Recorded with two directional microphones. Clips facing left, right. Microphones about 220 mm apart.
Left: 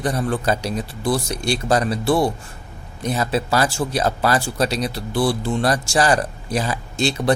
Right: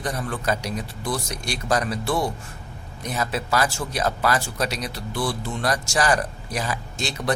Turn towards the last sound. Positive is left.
turn(degrees=30)  # may be behind; listen again after turning